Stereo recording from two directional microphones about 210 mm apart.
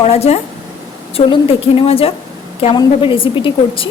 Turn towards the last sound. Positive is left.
turn(degrees=25)  # may be behind; listen again after turning